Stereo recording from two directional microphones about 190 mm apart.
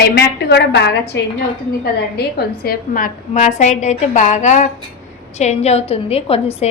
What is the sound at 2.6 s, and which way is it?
A woman's voice, 45° left (ahead or behind).